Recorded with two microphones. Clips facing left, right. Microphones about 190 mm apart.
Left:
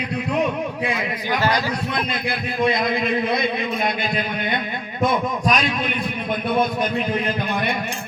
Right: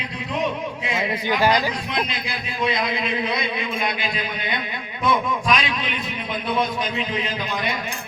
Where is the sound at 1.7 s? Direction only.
50° left (ahead or behind).